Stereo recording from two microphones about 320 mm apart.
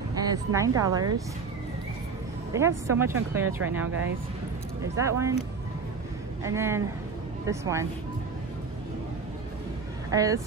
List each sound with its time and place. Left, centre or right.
0.2 s speech: centre
2.5 s speech: centre
4.9 s speech: centre
6.4 s speech: centre
10.1 s speech: centre